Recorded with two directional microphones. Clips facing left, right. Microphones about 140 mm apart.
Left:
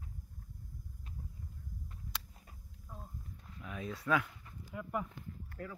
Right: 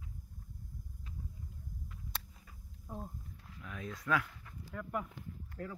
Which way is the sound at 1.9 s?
35° left (ahead or behind).